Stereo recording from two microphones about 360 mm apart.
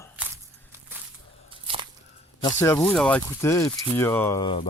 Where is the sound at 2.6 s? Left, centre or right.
Centre.